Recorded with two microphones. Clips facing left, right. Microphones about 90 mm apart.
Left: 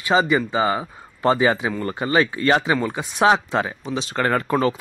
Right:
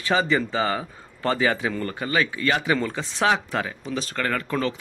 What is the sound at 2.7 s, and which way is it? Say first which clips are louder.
A man's voice: left 2 dB; 15° left (ahead or behind).